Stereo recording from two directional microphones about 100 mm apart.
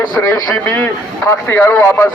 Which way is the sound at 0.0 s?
40° left (ahead or behind).